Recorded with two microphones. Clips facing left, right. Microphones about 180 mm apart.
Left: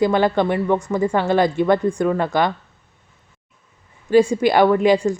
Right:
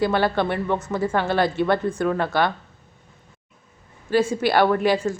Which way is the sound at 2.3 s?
15° left (ahead or behind).